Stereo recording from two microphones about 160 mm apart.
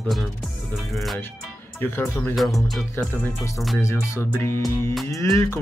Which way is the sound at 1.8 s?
15° left (ahead or behind).